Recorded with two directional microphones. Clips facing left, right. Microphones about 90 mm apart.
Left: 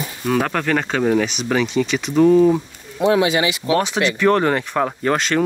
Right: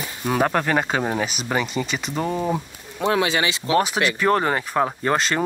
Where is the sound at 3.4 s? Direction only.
35° right (ahead or behind).